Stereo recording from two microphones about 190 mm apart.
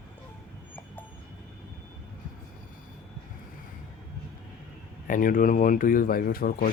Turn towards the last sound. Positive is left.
turn(degrees=50)  # may be behind; listen again after turning